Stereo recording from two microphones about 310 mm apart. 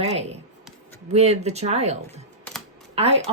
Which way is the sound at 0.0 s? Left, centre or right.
Centre.